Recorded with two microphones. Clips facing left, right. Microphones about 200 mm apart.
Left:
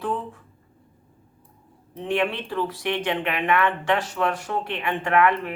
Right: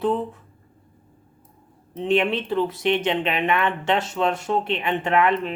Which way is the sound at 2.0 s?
20° right (ahead or behind).